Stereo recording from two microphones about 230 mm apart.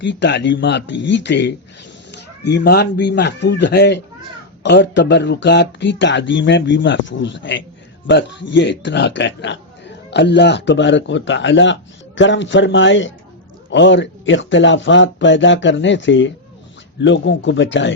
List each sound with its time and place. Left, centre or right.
0.0 s speech: left